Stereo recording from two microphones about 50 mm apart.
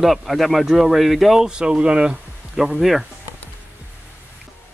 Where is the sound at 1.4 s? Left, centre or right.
Centre.